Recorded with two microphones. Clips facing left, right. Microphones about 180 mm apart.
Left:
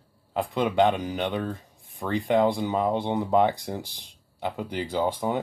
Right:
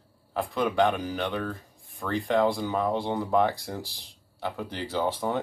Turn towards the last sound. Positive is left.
turn(degrees=15)  # may be behind; listen again after turning